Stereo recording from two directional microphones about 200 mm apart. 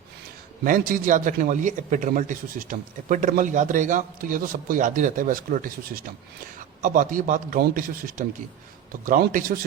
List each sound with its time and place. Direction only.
0.6 s a man's voice: 45° right (ahead or behind)